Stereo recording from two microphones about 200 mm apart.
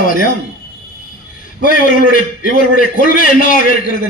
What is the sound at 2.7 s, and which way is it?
Speech, 45° left (ahead or behind).